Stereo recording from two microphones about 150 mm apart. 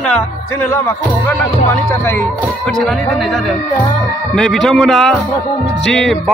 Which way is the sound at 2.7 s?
5° left (ahead or behind).